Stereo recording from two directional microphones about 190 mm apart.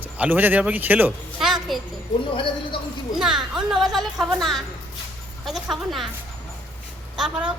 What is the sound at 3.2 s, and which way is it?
A woman's voice, centre (ahead or behind).